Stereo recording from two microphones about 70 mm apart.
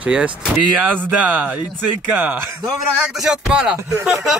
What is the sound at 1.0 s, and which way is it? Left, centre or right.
Speech, right.